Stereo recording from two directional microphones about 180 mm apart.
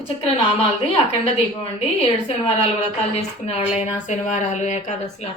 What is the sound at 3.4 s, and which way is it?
A woman's voice, 40° left (ahead or behind).